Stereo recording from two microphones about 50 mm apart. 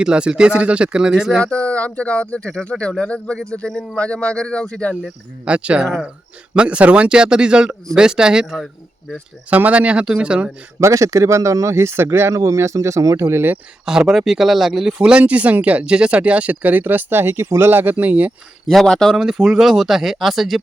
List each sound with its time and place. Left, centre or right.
0.0 s speech: centre
1.4 s speech: left
5.5 s speech: right; by 9.1 s centre
9.5 s speech: right
10.8 s speech: right
13.8 s speech: centre
15.2 s speech: right
18.7 s speech: centre
19.1 s speech: centre